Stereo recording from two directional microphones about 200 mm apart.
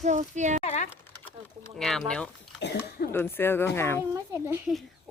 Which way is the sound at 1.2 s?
5° left (ahead or behind).